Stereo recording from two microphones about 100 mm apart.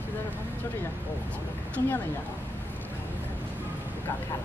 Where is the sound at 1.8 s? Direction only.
30° left (ahead or behind).